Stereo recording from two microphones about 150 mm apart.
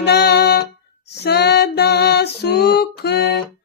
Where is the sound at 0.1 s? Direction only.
90° left.